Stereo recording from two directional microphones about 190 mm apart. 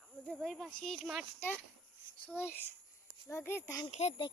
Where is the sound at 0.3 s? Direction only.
Centre (ahead or behind).